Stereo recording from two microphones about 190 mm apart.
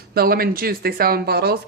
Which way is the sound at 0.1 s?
55° right (ahead or behind).